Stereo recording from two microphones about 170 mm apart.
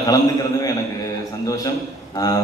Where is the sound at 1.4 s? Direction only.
20° left (ahead or behind).